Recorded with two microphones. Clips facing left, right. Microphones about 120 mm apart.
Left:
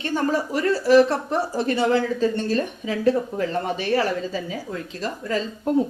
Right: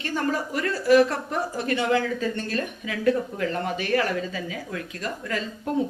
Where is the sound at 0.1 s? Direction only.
35° left (ahead or behind).